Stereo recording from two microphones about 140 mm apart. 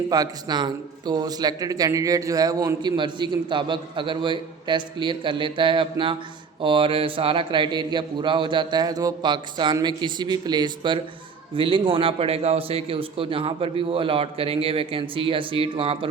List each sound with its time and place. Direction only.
0.1 s a man's voice: 30° right (ahead or behind)